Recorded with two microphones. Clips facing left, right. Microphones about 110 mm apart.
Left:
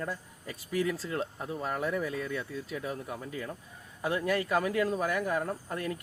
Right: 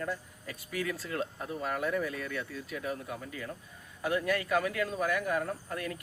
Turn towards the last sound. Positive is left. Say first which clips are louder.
# left 2 dB
turn(degrees=25)  # may be behind; listen again after turning